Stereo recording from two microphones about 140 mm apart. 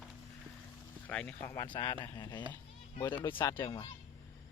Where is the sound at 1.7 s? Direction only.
35° left (ahead or behind).